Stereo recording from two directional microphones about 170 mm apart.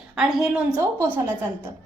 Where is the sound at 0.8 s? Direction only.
15° right (ahead or behind).